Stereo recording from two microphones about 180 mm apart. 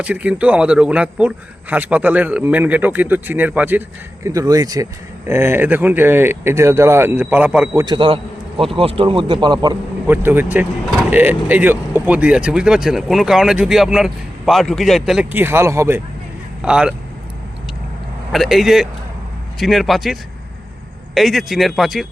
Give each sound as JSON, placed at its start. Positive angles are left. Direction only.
{"t": 0.0, "sound": "a man's voice", "side_deg": -5}
{"t": 7.9, "sound": "a man's voice", "side_deg": -30}
{"t": 10.1, "sound": "a man's voice", "side_deg": -10}
{"t": 16.6, "sound": "speech", "side_deg": -5}
{"t": 18.3, "sound": "speech", "side_deg": 0}
{"t": 21.2, "sound": "speech", "side_deg": 0}